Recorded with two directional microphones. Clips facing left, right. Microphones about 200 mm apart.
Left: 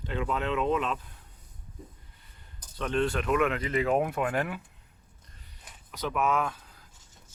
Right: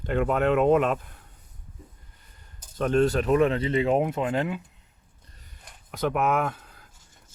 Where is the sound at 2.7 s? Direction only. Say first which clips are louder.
Right 6 dB; 45° right (ahead or behind); by 4.6 s 20° right (ahead or behind).